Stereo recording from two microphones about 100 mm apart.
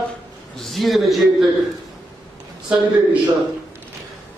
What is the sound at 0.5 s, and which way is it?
Speech, centre (ahead or behind).